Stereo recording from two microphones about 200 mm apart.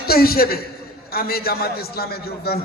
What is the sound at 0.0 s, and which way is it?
A man's voice, 50° left (ahead or behind).